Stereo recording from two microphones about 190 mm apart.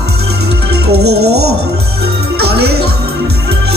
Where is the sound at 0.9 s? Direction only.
60° right (ahead or behind).